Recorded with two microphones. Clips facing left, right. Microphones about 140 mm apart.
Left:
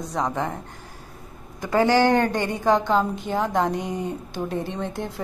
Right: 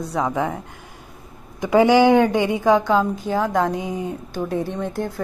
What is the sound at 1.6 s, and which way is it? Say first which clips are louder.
A woman's voice: right 5 dB; 15° right (ahead or behind).